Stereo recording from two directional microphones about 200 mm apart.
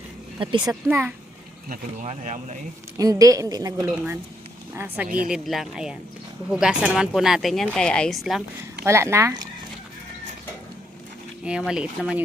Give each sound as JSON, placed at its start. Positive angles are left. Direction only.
{"t": 0.3, "sound": "speech", "side_deg": -25}
{"t": 0.7, "sound": "a woman's voice", "side_deg": -10}
{"t": 1.7, "sound": "speech", "side_deg": -40}
{"t": 3.0, "sound": "a woman's voice", "side_deg": -15}
{"t": 5.0, "sound": "speech", "side_deg": -40}
{"t": 5.3, "sound": "speech", "side_deg": 0}
{"t": 8.8, "sound": "a woman's voice", "side_deg": -15}
{"t": 11.4, "sound": "speech", "side_deg": -5}